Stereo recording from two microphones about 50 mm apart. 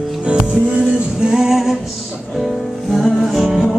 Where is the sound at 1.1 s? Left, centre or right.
Centre.